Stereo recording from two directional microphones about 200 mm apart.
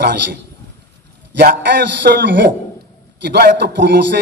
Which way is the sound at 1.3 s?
55° right (ahead or behind).